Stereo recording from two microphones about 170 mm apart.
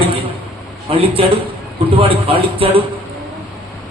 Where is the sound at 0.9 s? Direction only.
35° right (ahead or behind).